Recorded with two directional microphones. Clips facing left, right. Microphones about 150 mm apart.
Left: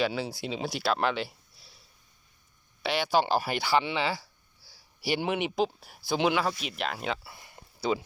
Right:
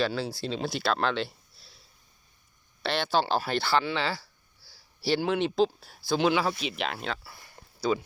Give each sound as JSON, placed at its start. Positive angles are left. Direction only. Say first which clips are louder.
{"t": 0.0, "sound": "speech", "louder": "right 1 dB", "side_deg": 20}
{"t": 2.8, "sound": "speech", "louder": "left 1 dB", "side_deg": 10}
{"t": 6.7, "sound": "speech", "louder": "right 1 dB", "side_deg": 0}
{"t": 7.1, "sound": "a sound", "louder": "left 2 dB", "side_deg": 20}